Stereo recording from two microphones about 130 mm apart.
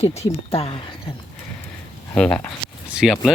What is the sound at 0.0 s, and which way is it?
Speech, 55° left (ahead or behind).